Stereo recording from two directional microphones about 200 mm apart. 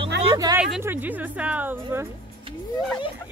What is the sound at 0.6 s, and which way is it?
Speech, 10° right (ahead or behind).